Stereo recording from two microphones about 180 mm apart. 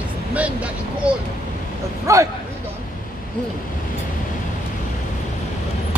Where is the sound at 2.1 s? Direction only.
15° right (ahead or behind).